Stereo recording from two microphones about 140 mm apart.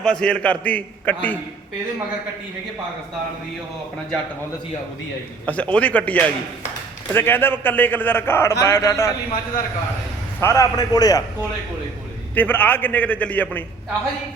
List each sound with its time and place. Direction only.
0.0 s a man's voice: 5° left (ahead or behind)
5.5 s a man's voice: 10° left (ahead or behind)
10.4 s a man's voice: 20° left (ahead or behind)
12.3 s a man's voice: 15° left (ahead or behind)